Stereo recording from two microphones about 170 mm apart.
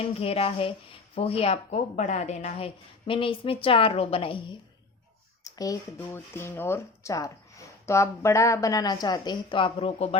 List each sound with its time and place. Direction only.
0.0 s a woman's voice: 35° left (ahead or behind)
5.4 s a woman's voice: 20° left (ahead or behind); by 10.2 s 35° left (ahead or behind)